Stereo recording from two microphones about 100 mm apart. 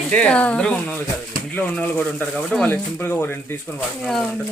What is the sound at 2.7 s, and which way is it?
Speech, 20° left (ahead or behind).